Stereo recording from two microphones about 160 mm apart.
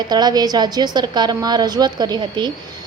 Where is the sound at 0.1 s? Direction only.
25° right (ahead or behind).